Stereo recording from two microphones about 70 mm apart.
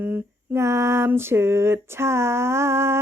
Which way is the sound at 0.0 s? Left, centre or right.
Right.